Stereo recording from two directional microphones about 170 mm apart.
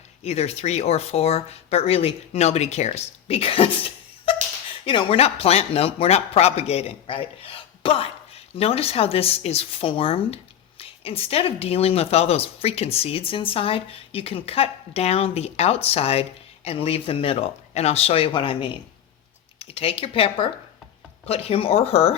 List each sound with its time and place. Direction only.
0.2 s speech: 40° left (ahead or behind)